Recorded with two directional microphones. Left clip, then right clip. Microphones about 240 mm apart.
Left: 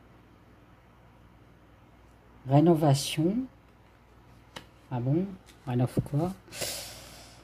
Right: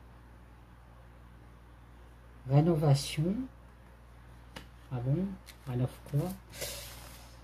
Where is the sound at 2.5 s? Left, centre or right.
Left.